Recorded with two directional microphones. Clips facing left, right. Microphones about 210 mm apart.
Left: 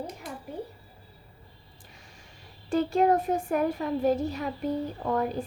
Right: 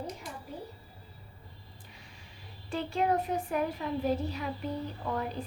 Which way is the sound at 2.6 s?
45° left (ahead or behind).